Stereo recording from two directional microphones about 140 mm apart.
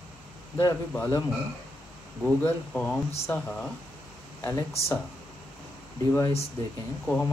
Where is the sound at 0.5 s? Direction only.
15° left (ahead or behind).